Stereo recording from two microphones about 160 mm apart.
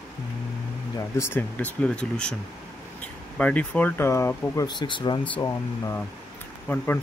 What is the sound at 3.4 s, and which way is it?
Speech, 10° left (ahead or behind).